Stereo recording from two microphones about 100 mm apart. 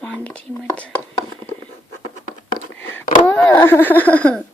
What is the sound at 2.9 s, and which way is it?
Speech, 15° left (ahead or behind).